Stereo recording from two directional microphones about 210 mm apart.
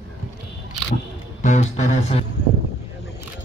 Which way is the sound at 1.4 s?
35° left (ahead or behind).